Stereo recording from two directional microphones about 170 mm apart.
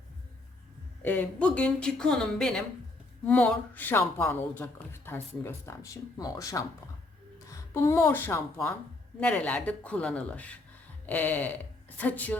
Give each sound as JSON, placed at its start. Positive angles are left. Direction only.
{"t": 1.0, "sound": "speech", "side_deg": 10}